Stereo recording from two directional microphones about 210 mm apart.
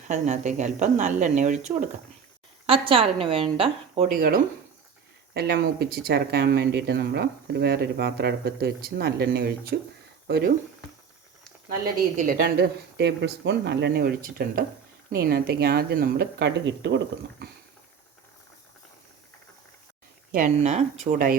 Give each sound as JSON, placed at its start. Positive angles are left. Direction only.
{"t": 0.1, "sound": "a woman's voice", "side_deg": -35}
{"t": 4.1, "sound": "a woman's voice", "side_deg": -40}
{"t": 12.1, "sound": "speech", "side_deg": -40}
{"t": 17.4, "sound": "a sound", "side_deg": -50}
{"t": 20.3, "sound": "a woman's voice", "side_deg": -35}